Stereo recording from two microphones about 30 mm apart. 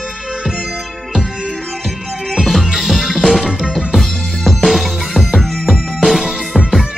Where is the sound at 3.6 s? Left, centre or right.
Right.